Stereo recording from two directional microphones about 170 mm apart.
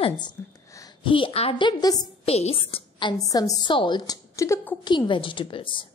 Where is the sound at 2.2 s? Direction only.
35° left (ahead or behind); by 4.9 s 15° left (ahead or behind).